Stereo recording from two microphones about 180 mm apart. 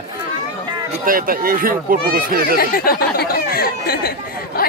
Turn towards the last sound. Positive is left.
turn(degrees=55)  # may be behind; listen again after turning